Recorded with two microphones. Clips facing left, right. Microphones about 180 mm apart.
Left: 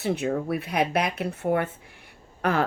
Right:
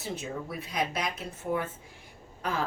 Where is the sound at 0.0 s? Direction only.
65° left (ahead or behind).